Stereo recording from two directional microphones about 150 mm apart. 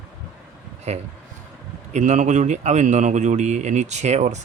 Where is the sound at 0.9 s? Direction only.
45° right (ahead or behind).